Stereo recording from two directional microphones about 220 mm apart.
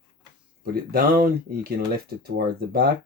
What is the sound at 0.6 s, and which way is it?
Speech, 45° right (ahead or behind).